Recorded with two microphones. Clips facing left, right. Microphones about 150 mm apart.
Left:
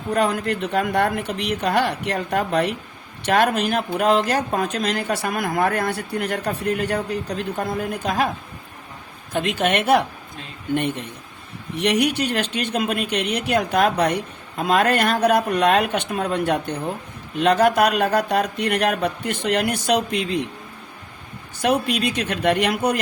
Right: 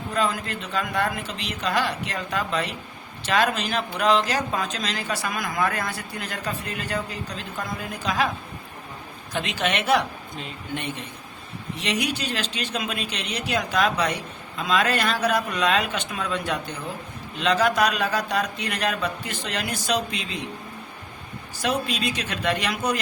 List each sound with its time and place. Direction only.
0.1 s speech: 65° left (ahead or behind)
9.3 s a woman's voice: 50° left (ahead or behind)
21.6 s speech: 60° left (ahead or behind)